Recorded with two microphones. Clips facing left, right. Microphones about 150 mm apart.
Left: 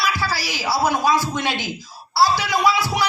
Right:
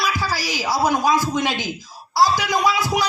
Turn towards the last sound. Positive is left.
turn(degrees=-15)  # may be behind; listen again after turning